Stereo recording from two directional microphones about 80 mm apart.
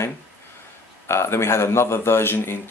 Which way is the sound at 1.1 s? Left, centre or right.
Left.